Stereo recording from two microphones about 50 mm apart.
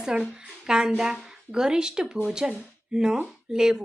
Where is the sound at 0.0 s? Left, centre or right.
Centre.